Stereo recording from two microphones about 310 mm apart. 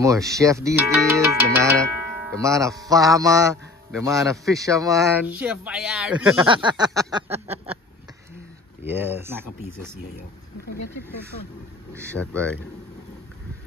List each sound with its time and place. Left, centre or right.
0.0 s speech: centre
6.4 s speech: centre
7.5 s a sound: centre
8.8 s speech: centre
11.9 s speech: centre